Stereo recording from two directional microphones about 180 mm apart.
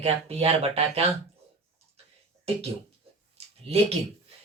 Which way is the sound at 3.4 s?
35° right (ahead or behind).